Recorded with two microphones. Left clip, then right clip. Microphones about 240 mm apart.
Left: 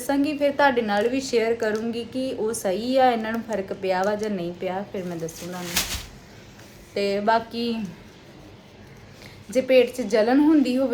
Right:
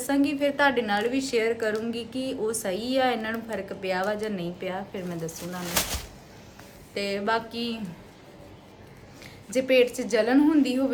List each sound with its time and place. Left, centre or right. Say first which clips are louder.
0.0 s a woman's voice: left 2 dB; centre
6.9 s a woman's voice: left 5 dB; centre
9.5 s a woman's voice: left 3 dB; centre